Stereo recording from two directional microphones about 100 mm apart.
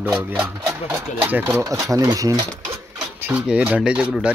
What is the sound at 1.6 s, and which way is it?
Speech, 35° right (ahead or behind).